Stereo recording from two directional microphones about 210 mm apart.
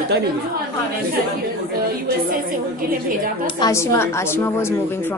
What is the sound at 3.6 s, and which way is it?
Speech, 15° left (ahead or behind).